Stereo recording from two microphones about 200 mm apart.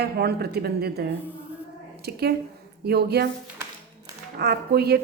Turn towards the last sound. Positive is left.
turn(degrees=-55)  # may be behind; listen again after turning